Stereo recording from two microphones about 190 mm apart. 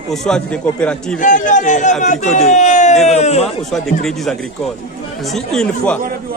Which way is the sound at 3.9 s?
Centre (ahead or behind).